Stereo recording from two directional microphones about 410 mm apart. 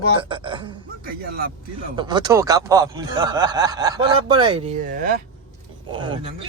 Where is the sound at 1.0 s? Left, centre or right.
Right.